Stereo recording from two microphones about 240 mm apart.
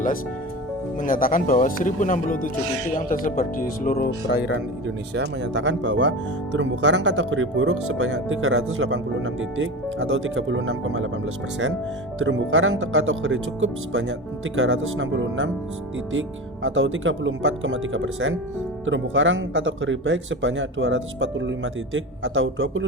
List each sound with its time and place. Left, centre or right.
1.0 s speech: left
5.1 s speech: right
12.2 s speech: right
16.6 s speech: right